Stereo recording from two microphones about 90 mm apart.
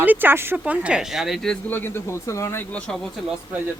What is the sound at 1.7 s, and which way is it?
Speech, 25° left (ahead or behind).